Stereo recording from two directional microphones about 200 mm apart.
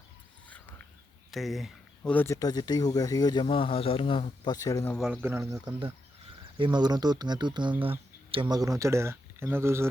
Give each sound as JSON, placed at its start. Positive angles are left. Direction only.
{"t": 1.3, "sound": "speech", "side_deg": 0}
{"t": 4.9, "sound": "speech", "side_deg": 0}
{"t": 5.6, "sound": "speech", "side_deg": -25}